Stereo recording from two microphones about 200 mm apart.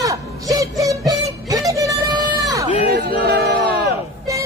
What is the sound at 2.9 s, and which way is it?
Music, 50° right (ahead or behind).